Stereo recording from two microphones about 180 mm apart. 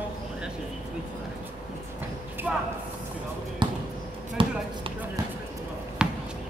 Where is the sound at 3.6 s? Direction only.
25° right (ahead or behind).